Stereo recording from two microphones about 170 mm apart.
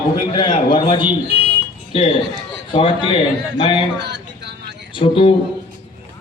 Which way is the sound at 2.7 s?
30° left (ahead or behind).